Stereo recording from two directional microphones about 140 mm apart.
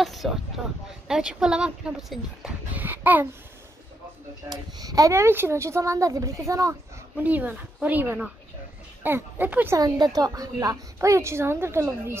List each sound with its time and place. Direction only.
0.0 s a sound: centre (ahead or behind)
1.0 s speech: 5° right (ahead or behind)
4.5 s a woman's voice: 25° right (ahead or behind)
7.2 s speech: 10° right (ahead or behind)
9.8 s a woman's voice: 30° right (ahead or behind)